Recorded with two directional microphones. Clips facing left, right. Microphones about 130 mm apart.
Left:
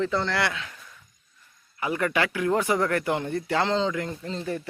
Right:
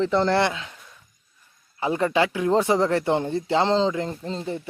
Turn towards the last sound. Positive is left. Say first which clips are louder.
# right 2 dB
turn(degrees=-30)  # may be behind; listen again after turning